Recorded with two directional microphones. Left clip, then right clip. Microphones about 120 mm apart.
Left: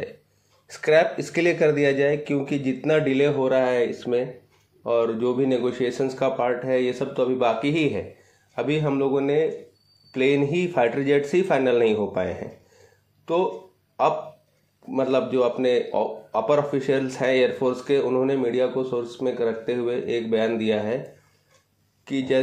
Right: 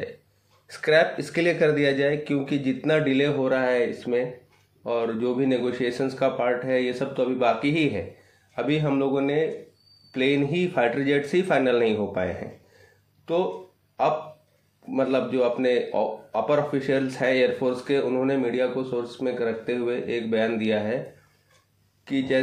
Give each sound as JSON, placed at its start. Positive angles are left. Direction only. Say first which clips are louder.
{"t": 0.7, "sound": "speech", "louder": "left 1 dB", "side_deg": 30}
{"t": 22.0, "sound": "speech", "louder": "left 1 dB", "side_deg": 30}